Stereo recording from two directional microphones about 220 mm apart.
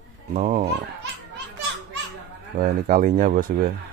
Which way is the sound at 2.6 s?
40° right (ahead or behind).